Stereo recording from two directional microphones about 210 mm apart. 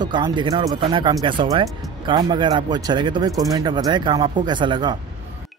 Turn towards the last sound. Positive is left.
turn(degrees=-20)  # may be behind; listen again after turning